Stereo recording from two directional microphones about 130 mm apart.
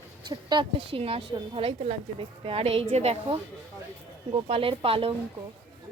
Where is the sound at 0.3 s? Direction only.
35° right (ahead or behind); by 3.2 s 55° right (ahead or behind).